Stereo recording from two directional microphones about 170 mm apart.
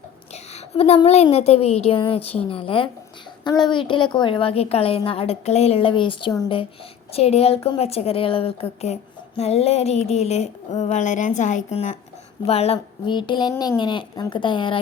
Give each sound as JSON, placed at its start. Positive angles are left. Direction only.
{"t": 0.5, "sound": "a woman's voice", "side_deg": 35}
{"t": 7.1, "sound": "a woman's voice", "side_deg": 35}